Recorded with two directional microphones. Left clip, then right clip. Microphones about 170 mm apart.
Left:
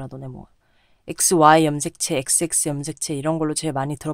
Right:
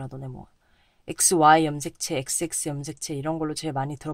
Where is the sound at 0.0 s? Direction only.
20° left (ahead or behind).